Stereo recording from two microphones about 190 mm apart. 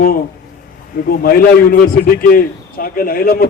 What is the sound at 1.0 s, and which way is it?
A man's voice, 50° left (ahead or behind).